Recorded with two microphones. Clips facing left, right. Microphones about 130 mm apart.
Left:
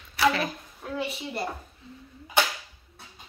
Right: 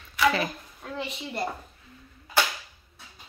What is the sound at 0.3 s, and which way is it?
Speech, 5° left (ahead or behind).